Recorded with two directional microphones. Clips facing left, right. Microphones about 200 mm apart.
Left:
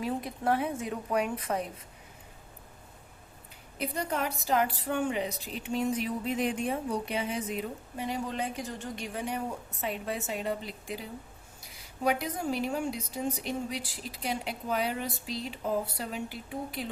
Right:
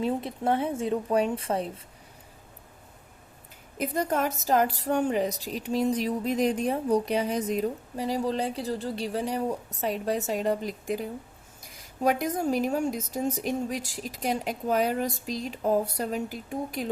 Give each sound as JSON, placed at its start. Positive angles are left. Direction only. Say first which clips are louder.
{"t": 0.0, "sound": "a woman's voice", "louder": "right 4 dB", "side_deg": -25}
{"t": 3.8, "sound": "a woman's voice", "louder": "right 5 dB", "side_deg": -45}